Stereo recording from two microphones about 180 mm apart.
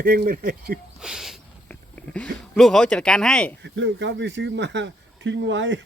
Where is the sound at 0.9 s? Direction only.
5° right (ahead or behind).